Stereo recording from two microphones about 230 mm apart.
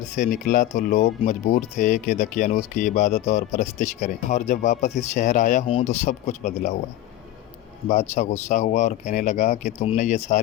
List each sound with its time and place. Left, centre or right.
0.2 s speech: left
7.9 s speech: left